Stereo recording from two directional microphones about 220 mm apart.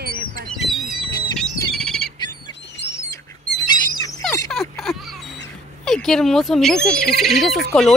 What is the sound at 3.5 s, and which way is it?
Squawk, 15° left (ahead or behind).